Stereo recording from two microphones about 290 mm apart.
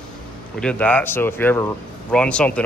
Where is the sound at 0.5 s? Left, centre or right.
Centre.